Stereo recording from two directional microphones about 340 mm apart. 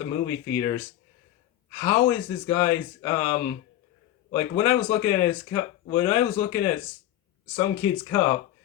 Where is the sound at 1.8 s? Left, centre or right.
Centre.